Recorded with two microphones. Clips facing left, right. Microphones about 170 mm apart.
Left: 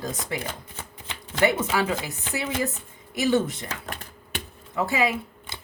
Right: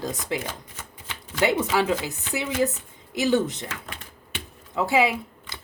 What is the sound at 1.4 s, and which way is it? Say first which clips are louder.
Speech: right 1 dB; 15° right (ahead or behind).